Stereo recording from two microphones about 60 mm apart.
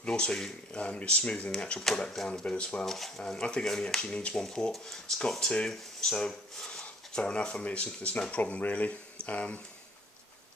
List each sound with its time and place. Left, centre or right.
0.0 s speech: centre
1.8 s speech: centre; by 9.6 s left